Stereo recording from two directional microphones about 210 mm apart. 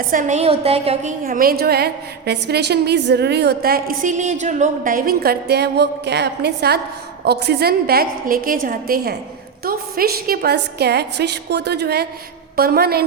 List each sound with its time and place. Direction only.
0.1 s a woman's voice: 35° right (ahead or behind)
1.2 s a woman's voice: 45° right (ahead or behind)